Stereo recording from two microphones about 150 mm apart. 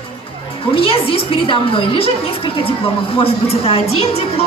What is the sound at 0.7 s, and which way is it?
A woman's voice, 40° left (ahead or behind).